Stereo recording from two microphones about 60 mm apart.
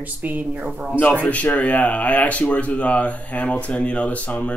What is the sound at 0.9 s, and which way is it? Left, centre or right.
Speech, left.